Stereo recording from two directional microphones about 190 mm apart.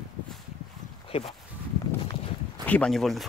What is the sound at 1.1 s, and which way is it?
Speech, 30° left (ahead or behind).